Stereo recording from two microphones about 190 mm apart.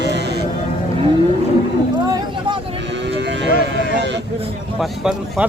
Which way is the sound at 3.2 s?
65° right (ahead or behind).